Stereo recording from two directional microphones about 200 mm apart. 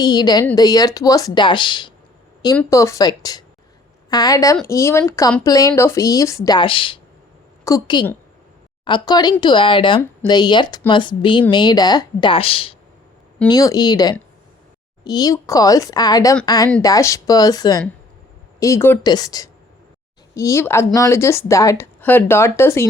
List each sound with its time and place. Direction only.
0.0 s a woman's voice: 20° left (ahead or behind)